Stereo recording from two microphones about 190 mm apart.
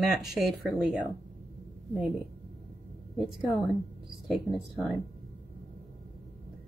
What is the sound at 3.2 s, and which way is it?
Speech, centre (ahead or behind).